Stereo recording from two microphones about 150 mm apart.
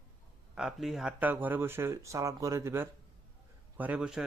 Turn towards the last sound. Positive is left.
turn(degrees=-5)  # may be behind; listen again after turning